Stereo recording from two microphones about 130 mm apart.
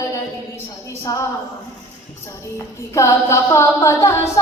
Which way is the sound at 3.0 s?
25° left (ahead or behind).